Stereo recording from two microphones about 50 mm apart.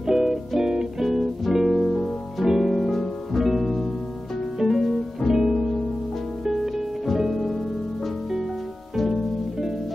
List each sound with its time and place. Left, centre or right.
0.0 s music: centre
8.9 s music: centre